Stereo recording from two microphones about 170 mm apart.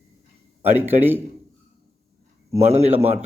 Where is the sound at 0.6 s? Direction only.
10° right (ahead or behind).